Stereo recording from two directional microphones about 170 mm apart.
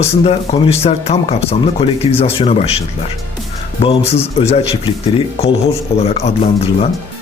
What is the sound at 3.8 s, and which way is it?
Speech, 35° left (ahead or behind).